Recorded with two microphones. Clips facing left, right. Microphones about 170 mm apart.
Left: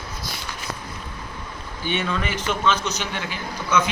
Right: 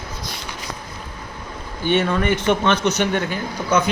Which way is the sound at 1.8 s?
50° right (ahead or behind).